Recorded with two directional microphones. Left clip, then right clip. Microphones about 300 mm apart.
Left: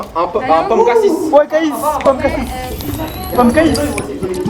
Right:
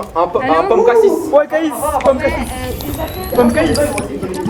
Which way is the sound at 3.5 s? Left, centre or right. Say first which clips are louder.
Left 1 dB; centre.